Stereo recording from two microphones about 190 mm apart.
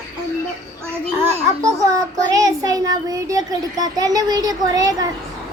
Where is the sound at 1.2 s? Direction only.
15° right (ahead or behind).